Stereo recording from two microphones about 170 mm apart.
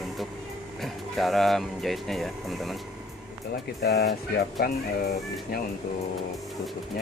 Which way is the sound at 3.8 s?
75° left (ahead or behind).